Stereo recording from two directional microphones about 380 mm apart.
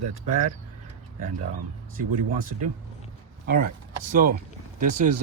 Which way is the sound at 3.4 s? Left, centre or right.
Right.